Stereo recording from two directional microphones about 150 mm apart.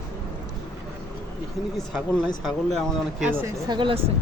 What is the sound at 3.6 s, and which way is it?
Speech, 30° right (ahead or behind).